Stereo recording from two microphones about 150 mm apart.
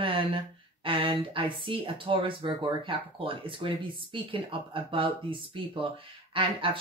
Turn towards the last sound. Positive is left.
turn(degrees=-35)  # may be behind; listen again after turning